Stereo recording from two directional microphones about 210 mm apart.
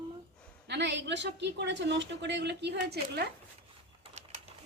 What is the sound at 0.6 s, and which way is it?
A woman's voice, 55° right (ahead or behind).